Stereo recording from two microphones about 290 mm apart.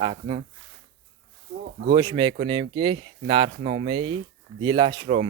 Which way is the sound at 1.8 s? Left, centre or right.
Centre.